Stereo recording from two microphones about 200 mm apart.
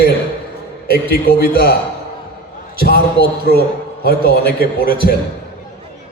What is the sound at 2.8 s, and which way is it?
A man's voice, 50° left (ahead or behind).